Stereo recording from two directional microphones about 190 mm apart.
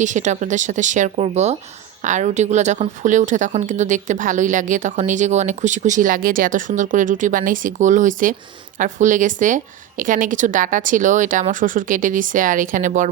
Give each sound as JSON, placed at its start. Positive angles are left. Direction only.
{"t": 0.0, "sound": "speech", "side_deg": -40}